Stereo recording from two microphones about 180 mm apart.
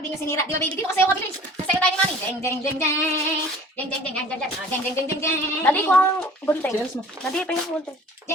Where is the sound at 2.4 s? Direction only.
15° left (ahead or behind).